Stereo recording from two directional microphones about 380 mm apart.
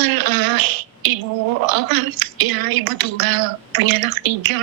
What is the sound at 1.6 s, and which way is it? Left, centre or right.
A woman's voice, right.